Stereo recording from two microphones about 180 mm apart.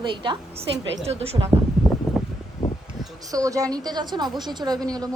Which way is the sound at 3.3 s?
20° right (ahead or behind).